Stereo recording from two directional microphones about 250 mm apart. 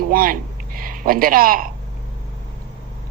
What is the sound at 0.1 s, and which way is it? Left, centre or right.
Speech, right.